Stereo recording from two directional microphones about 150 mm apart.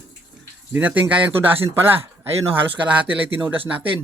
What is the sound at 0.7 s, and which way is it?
Speech, 10° right (ahead or behind).